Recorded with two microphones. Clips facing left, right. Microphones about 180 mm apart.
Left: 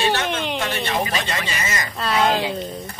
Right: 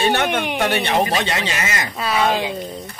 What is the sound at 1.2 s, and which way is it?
Speech, 80° right.